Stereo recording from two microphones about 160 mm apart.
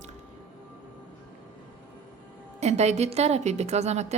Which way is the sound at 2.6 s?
45° right (ahead or behind).